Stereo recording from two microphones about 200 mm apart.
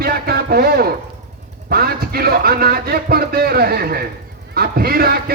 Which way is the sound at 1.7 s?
50° right (ahead or behind).